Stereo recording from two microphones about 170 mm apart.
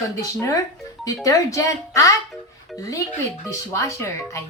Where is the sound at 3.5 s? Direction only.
20° left (ahead or behind).